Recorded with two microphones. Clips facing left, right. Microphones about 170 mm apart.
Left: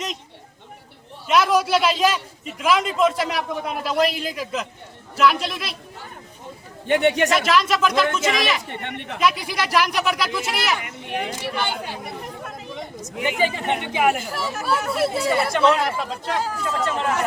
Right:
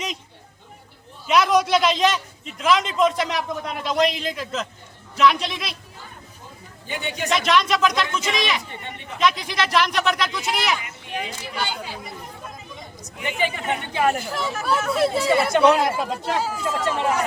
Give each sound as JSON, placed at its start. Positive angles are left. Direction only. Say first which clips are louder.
{"t": 1.3, "sound": "a man's voice", "louder": "even", "side_deg": 5}
{"t": 6.8, "sound": "speech", "louder": "left 11 dB", "side_deg": 75}
{"t": 7.3, "sound": "a man's voice", "louder": "left 1 dB", "side_deg": 5}
{"t": 8.6, "sound": "speech", "louder": "left 5 dB", "side_deg": 70}
{"t": 9.1, "sound": "speech", "louder": "even", "side_deg": 5}
{"t": 10.8, "sound": "a child's voice", "louder": "left 3 dB", "side_deg": 60}
{"t": 13.7, "sound": "a man's voice", "louder": "even", "side_deg": 15}